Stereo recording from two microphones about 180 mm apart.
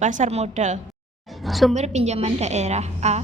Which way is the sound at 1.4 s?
Centre (ahead or behind).